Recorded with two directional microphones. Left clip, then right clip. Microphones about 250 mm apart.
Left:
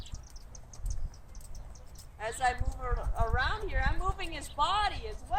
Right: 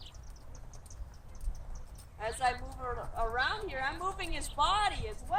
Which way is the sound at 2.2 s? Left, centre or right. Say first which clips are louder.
Left 1 dB; centre.